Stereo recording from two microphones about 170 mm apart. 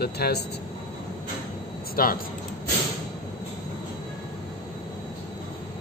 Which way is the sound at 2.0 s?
55° left (ahead or behind).